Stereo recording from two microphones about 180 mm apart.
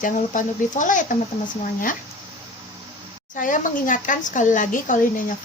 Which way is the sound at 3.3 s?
45° left (ahead or behind).